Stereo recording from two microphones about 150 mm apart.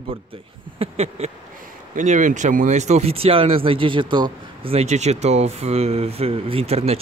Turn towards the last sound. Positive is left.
turn(degrees=-40)  # may be behind; listen again after turning